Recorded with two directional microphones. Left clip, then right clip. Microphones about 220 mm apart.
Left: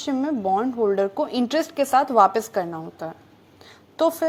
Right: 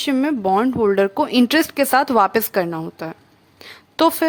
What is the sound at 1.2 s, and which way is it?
A woman's voice, 60° right (ahead or behind).